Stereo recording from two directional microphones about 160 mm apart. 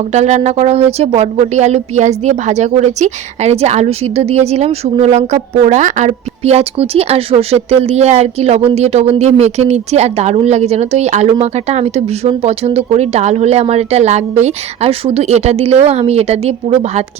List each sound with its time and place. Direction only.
0.0 s speech: 45° right (ahead or behind)